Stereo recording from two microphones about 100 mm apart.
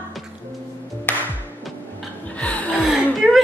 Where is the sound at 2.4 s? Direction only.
15° left (ahead or behind).